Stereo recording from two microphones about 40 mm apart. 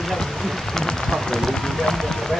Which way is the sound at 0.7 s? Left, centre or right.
Centre.